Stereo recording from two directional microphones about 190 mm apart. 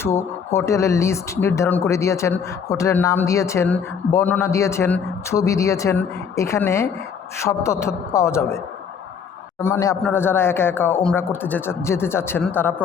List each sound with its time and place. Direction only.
0.0 s speech: 15° left (ahead or behind)
9.6 s speech: 15° left (ahead or behind)